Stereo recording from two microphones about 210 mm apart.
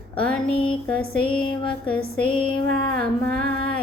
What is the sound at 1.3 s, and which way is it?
Music, 25° left (ahead or behind).